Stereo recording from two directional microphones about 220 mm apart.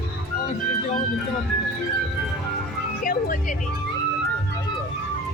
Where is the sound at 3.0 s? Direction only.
40° left (ahead or behind).